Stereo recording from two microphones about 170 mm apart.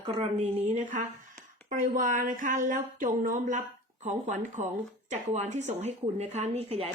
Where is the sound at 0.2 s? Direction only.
40° right (ahead or behind).